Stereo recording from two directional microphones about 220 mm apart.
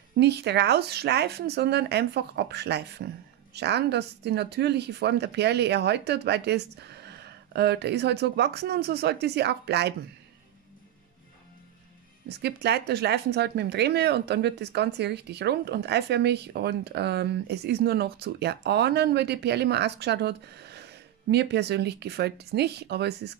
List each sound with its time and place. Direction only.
0.2 s speech: 50° right (ahead or behind)
12.3 s speech: 50° right (ahead or behind)